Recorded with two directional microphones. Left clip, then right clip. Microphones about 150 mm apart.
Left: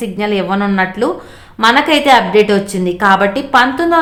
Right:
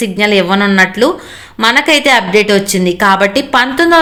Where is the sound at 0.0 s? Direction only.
20° right (ahead or behind).